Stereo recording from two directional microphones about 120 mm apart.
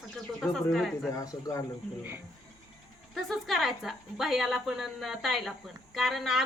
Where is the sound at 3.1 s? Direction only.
Centre (ahead or behind).